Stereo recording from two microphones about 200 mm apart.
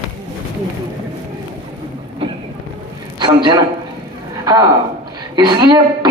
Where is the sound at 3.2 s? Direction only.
25° right (ahead or behind).